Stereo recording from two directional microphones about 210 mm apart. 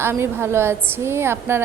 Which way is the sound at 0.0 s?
10° right (ahead or behind).